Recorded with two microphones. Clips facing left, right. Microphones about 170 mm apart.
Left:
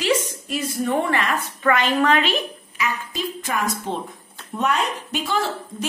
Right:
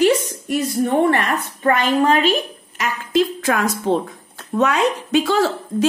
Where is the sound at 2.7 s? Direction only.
90° right.